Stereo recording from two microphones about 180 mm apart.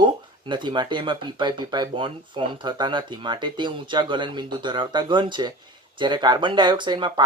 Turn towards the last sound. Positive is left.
turn(degrees=-25)  # may be behind; listen again after turning